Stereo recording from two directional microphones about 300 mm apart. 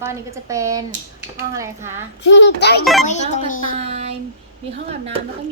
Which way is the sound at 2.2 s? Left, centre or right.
Left.